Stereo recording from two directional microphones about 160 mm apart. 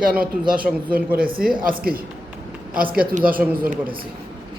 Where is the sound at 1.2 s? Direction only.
65° right (ahead or behind).